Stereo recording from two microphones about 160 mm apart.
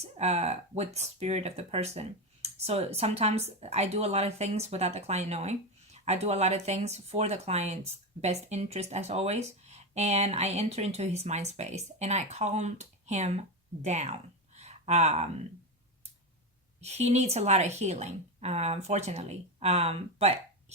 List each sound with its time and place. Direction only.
0.0 s speech: 45° right (ahead or behind)
16.8 s speech: 40° right (ahead or behind)